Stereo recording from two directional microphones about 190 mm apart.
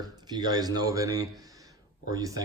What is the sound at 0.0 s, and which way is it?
A man's voice, 20° right (ahead or behind).